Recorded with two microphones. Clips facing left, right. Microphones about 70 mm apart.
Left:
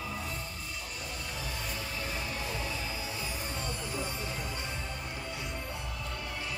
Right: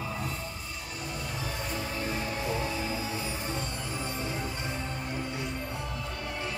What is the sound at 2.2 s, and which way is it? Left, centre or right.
Music, right.